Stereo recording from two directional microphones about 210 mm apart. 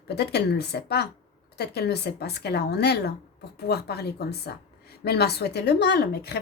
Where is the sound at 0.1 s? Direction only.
50° left (ahead or behind).